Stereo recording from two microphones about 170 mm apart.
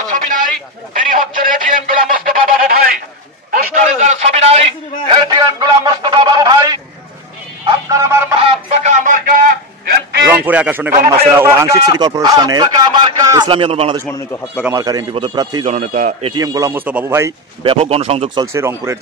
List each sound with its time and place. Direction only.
0.0 s a sound: 50° right (ahead or behind)
3.7 s a sound: 45° right (ahead or behind)
5.2 s a sound: 25° right (ahead or behind)
7.9 s fowl: 15° right (ahead or behind)
8.4 s a sound: 35° right (ahead or behind)
10.3 s a man's voice: 10° right (ahead or behind); by 14.0 s 35° right (ahead or behind)
14.1 s a man's voice: 15° left (ahead or behind)
14.6 s speech: 20° right (ahead or behind)
15.6 s a man's voice: 50° right (ahead or behind)
16.3 s a man's voice: 20° right (ahead or behind)
17.6 s speech: 35° right (ahead or behind)
18.4 s a man's voice: 15° right (ahead or behind)